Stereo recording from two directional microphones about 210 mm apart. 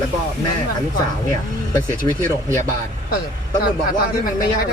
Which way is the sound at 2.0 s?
20° left (ahead or behind).